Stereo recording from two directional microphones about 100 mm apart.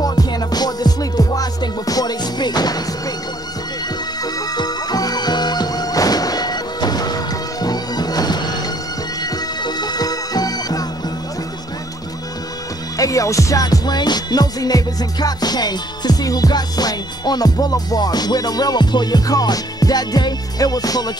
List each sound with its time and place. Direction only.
0.0 s music: 40° left (ahead or behind)
4.2 s music: 40° left (ahead or behind)
12.9 s music: 35° left (ahead or behind)